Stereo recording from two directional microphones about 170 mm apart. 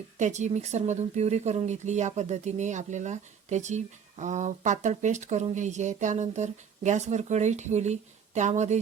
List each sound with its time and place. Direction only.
0.2 s speech: 45° right (ahead or behind)